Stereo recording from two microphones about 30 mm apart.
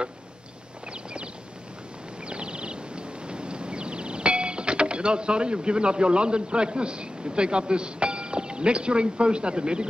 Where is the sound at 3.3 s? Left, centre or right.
Right.